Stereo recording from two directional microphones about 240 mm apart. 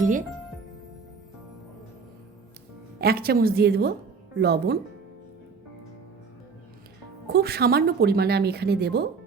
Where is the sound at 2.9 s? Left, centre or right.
Right.